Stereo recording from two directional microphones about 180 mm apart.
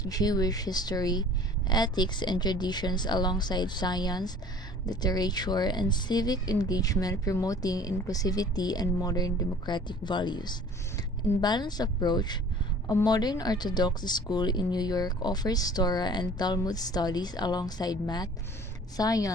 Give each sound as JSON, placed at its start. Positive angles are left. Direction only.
{"t": 0.0, "sound": "speech", "side_deg": 20}